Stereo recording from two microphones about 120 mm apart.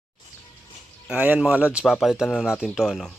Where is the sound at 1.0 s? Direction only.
15° right (ahead or behind).